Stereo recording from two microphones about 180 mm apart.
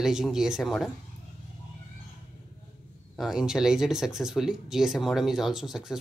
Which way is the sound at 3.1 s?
Centre (ahead or behind).